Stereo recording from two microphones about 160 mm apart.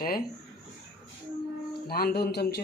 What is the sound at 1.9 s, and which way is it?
Speech, 75° left (ahead or behind).